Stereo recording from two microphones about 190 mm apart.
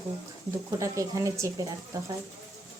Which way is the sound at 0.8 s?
15° right (ahead or behind).